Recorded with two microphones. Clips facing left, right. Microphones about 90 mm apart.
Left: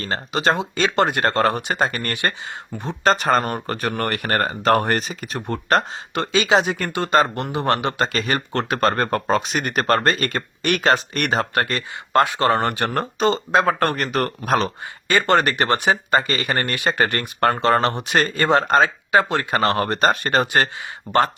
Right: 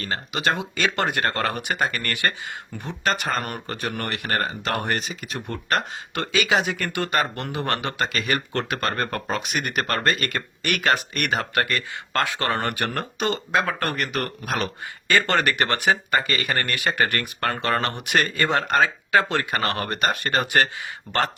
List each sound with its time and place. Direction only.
0.0 s speech: 35° left (ahead or behind)